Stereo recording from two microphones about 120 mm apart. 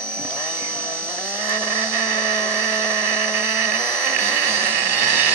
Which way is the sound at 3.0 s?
15° right (ahead or behind).